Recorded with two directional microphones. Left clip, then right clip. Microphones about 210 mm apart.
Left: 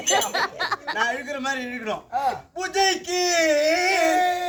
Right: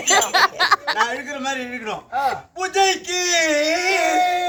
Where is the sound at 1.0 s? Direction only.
Centre (ahead or behind).